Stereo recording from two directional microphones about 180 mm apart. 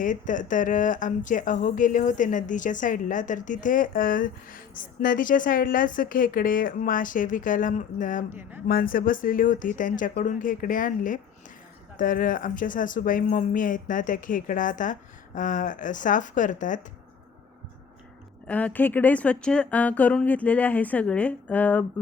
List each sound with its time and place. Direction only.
0.0 s speech: 45° left (ahead or behind)
8.3 s speech: 10° right (ahead or behind)
8.6 s speech: 55° left (ahead or behind)
18.4 s speech: 10° left (ahead or behind)